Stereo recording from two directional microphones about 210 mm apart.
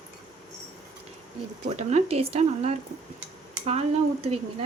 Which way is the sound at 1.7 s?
30° right (ahead or behind).